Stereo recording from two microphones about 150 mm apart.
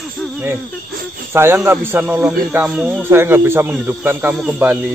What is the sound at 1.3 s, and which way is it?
Speech, 15° right (ahead or behind).